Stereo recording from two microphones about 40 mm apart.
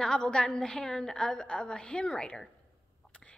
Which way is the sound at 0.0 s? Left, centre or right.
Left.